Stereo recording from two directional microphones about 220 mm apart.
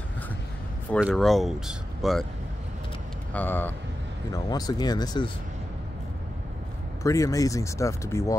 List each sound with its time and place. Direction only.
1.0 s speech: centre (ahead or behind)
3.3 s speech: 10° left (ahead or behind)
7.0 s speech: 15° left (ahead or behind)